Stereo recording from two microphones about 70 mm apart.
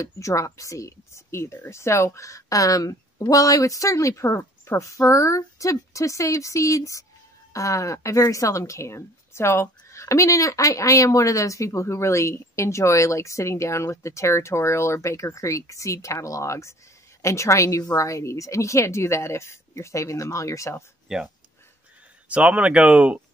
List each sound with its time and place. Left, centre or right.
0.0 s a woman's voice: left
21.1 s speech: centre
22.3 s speech: centre